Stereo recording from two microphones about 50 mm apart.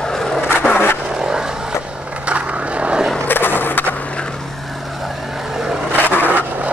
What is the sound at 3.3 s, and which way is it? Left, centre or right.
Skateboard, left.